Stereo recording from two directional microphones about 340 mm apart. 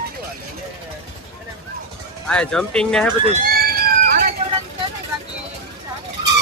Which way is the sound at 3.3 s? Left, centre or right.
Right.